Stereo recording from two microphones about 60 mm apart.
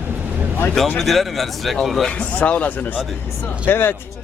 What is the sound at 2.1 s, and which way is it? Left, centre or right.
Speech, left.